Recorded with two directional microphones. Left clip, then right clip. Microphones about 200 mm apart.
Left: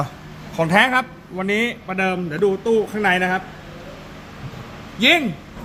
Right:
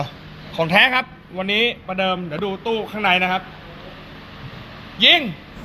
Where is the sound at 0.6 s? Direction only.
20° left (ahead or behind).